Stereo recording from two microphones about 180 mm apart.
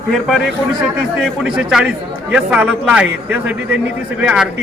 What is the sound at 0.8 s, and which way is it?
A man's voice, 5° right (ahead or behind).